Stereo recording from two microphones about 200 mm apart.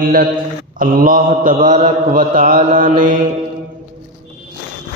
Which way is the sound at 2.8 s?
40° right (ahead or behind).